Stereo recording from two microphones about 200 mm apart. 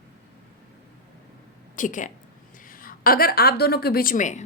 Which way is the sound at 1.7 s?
40° left (ahead or behind).